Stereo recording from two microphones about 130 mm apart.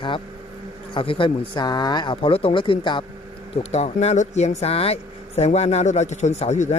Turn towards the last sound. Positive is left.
turn(degrees=60)  # may be behind; listen again after turning